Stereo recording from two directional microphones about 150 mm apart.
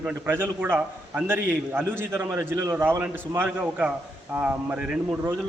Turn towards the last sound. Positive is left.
turn(degrees=-5)  # may be behind; listen again after turning